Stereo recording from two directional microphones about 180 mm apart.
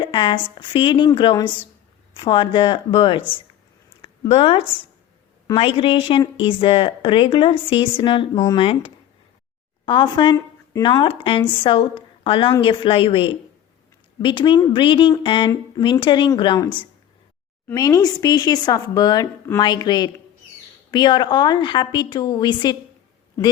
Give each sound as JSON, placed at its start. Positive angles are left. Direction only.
{"t": 0.0, "sound": "speech", "side_deg": 25}
{"t": 5.5, "sound": "speech", "side_deg": 30}
{"t": 8.6, "sound": "speech", "side_deg": 30}